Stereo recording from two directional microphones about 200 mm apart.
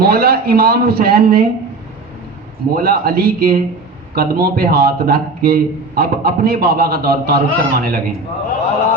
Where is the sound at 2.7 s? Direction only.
50° right (ahead or behind).